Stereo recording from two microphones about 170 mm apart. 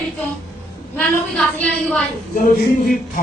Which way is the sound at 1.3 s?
5° left (ahead or behind).